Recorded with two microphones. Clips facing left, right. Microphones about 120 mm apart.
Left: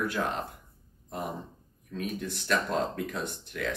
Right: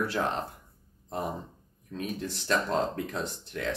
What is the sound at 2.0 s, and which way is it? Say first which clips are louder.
Speech: even; 30° right (ahead or behind).